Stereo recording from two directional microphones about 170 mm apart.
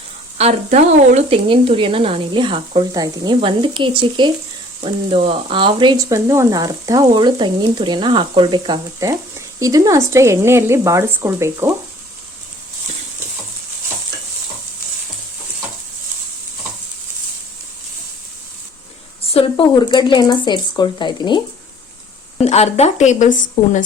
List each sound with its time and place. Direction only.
0.3 s speech: 40° right (ahead or behind); by 11.7 s 15° right (ahead or behind)
19.3 s speech: 35° left (ahead or behind)
22.4 s a woman's voice: 40° left (ahead or behind)